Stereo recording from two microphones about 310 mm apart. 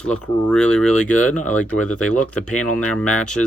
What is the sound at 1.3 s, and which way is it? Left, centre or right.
Speech, left.